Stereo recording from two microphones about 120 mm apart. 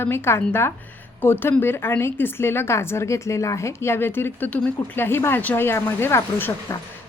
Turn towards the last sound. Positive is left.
turn(degrees=20)  # may be behind; listen again after turning